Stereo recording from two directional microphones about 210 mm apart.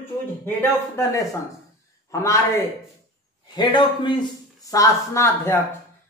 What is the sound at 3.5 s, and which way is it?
A man's voice, 20° left (ahead or behind).